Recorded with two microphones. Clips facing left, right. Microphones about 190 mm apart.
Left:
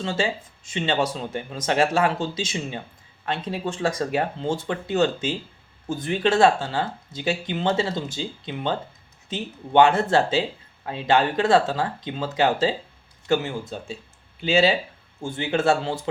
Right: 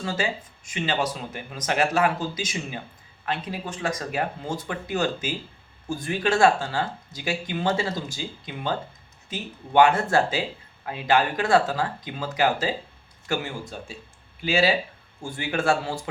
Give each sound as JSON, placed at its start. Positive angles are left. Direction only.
{"t": 0.0, "sound": "speech", "side_deg": 25}